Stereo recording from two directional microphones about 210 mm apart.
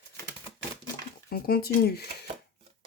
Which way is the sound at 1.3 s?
45° left (ahead or behind).